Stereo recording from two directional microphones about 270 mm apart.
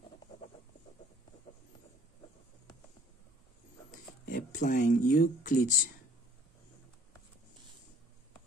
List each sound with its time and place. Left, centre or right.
4.3 s speech: left